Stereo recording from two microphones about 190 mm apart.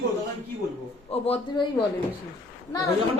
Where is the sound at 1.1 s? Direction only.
30° left (ahead or behind).